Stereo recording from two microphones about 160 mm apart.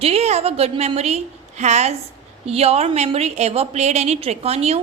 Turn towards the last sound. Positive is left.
turn(degrees=-40)  # may be behind; listen again after turning